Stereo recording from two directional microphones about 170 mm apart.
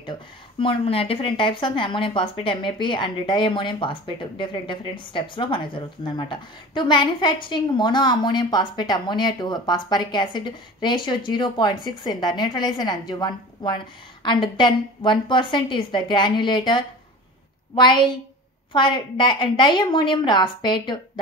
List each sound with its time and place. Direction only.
0.0 s speech: 30° left (ahead or behind)